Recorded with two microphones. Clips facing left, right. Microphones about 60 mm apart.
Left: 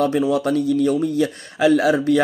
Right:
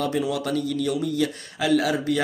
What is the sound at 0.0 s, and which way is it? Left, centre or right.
Speech, left.